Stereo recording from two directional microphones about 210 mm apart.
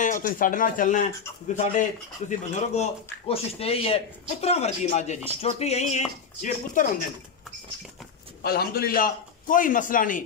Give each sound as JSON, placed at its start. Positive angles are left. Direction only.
{"t": 0.0, "sound": "speech", "side_deg": 40}
{"t": 8.4, "sound": "speech", "side_deg": 50}